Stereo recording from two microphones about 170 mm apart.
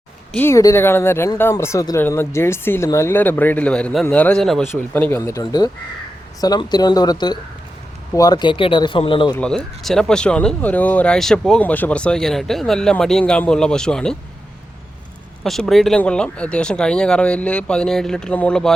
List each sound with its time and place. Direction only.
0.3 s speech: 15° left (ahead or behind)
9.4 s speech: 5° left (ahead or behind)
15.4 s speech: centre (ahead or behind)